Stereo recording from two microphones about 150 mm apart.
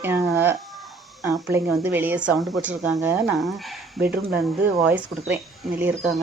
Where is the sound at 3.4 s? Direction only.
Centre (ahead or behind).